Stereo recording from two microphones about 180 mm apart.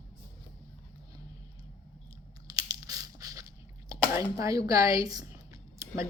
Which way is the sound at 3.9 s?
20° right (ahead or behind).